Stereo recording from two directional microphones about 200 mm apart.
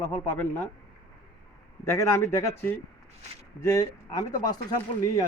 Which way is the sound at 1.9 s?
15° left (ahead or behind).